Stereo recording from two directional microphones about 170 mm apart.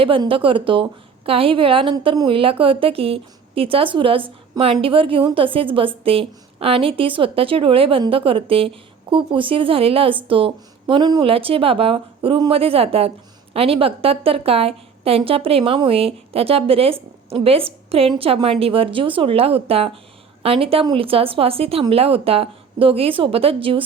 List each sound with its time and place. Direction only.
0.0 s a woman's voice: 30° right (ahead or behind)